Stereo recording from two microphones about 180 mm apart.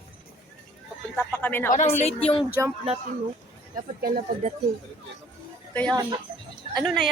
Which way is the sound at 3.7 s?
50° right (ahead or behind).